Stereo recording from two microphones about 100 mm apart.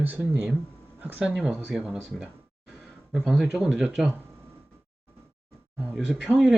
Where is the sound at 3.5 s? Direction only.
5° right (ahead or behind).